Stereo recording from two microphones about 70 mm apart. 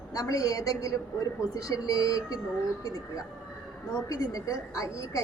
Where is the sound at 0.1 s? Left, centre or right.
Left.